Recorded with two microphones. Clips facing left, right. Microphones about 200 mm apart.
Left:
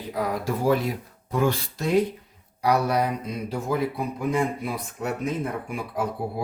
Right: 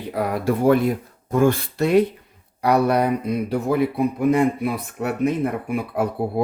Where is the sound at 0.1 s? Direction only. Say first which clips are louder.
Right 5 dB; 60° right (ahead or behind).